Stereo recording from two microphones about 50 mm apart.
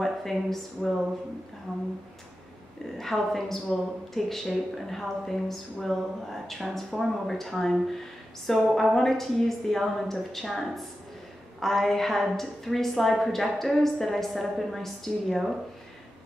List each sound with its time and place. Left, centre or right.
0.0 s a woman's voice: centre
3.0 s a woman's voice: centre